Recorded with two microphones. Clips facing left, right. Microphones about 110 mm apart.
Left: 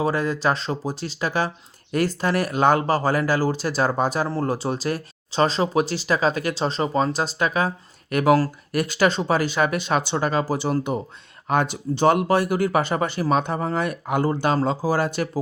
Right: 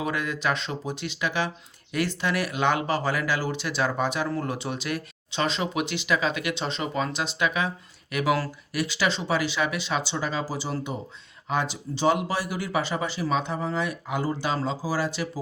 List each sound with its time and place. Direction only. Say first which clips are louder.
0.0 s speech: left 6 dB; 35° left (ahead or behind); by 15.3 s 55° left (ahead or behind)